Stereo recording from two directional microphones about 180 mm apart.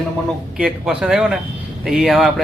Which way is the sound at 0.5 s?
5° right (ahead or behind).